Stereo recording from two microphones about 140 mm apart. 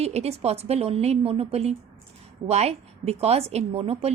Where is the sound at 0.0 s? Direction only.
50° right (ahead or behind).